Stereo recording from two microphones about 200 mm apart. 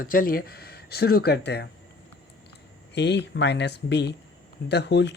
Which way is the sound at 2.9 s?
60° left (ahead or behind).